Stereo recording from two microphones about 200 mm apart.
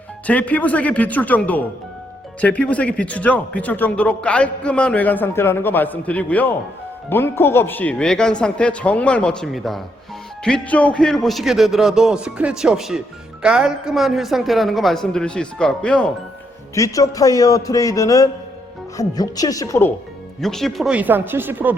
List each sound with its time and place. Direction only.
0.3 s a man's voice: 5° left (ahead or behind)
16.7 s a man's voice: 15° left (ahead or behind)
20.4 s speech: centre (ahead or behind)